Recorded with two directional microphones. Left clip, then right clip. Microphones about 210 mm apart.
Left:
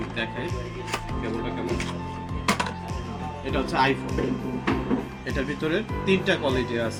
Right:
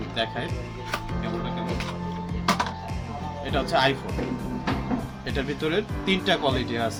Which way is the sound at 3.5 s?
30° right (ahead or behind).